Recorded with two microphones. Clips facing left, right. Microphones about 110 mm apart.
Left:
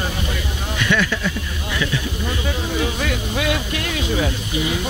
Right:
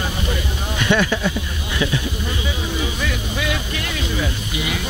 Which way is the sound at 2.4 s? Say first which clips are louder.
Left 4 dB; 50° left (ahead or behind).